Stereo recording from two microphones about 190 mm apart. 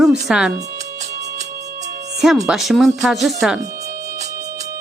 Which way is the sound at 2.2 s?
Centre (ahead or behind).